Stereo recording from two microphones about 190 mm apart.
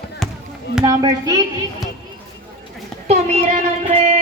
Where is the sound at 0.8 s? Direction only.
25° right (ahead or behind).